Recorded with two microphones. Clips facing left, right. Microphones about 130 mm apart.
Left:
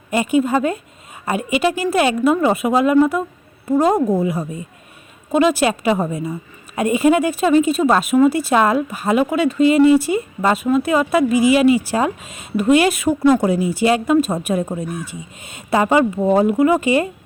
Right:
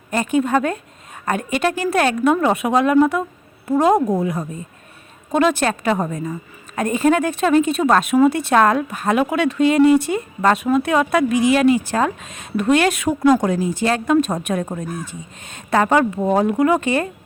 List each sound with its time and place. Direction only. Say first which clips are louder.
0.1 s a woman's voice: left 1 dB; 5° left (ahead or behind)